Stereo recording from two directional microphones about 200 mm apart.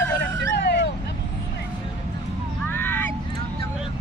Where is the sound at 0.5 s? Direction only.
55° left (ahead or behind).